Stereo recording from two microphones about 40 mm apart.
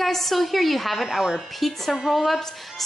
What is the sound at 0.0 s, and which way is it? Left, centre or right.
A woman's voice, centre.